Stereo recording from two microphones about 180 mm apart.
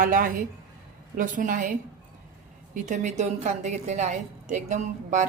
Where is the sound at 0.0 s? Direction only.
50° right (ahead or behind).